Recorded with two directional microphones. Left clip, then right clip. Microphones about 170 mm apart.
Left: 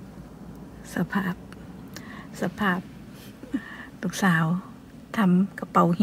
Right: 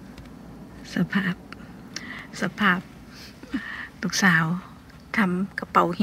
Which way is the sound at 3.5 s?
35° left (ahead or behind).